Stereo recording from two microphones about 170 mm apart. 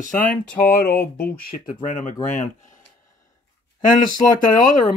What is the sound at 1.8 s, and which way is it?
Speech, 50° left (ahead or behind).